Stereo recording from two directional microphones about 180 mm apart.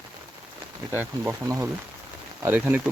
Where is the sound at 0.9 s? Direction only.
10° right (ahead or behind).